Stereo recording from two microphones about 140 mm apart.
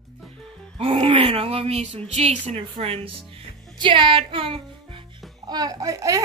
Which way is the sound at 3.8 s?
35° right (ahead or behind).